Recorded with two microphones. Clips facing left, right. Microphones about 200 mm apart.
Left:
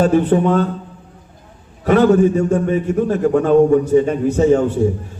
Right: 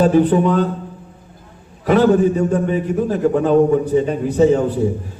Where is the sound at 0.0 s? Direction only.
40° right (ahead or behind).